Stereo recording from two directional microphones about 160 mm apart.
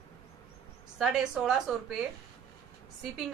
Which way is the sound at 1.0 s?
5° right (ahead or behind).